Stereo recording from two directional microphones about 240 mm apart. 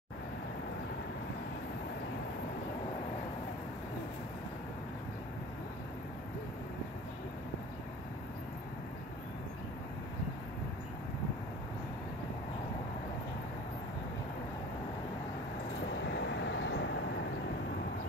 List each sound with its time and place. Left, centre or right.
16.2 s vehicle: left